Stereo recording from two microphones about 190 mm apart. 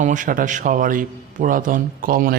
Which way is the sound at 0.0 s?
45° right (ahead or behind).